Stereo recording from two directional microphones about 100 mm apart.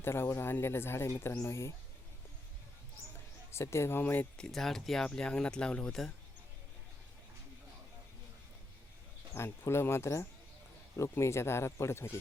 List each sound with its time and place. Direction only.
0.0 s speech: 25° left (ahead or behind)
3.5 s speech: 25° left (ahead or behind)
4.4 s speech: 5° left (ahead or behind)
9.3 s speech: 25° left (ahead or behind)